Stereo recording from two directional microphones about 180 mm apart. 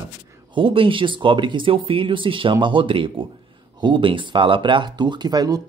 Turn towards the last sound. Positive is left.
turn(degrees=-20)  # may be behind; listen again after turning